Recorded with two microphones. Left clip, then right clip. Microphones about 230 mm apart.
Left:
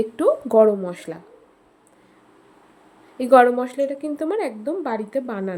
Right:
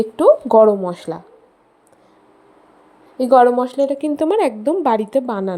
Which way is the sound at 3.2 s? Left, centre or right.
Centre.